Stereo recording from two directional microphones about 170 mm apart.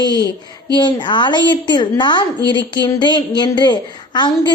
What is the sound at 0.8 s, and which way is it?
A woman's voice, 25° left (ahead or behind).